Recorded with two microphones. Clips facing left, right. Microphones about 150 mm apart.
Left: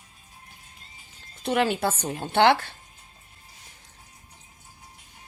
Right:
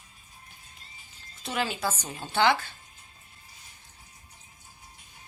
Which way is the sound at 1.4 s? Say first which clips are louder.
Left 7 dB; 60° left (ahead or behind).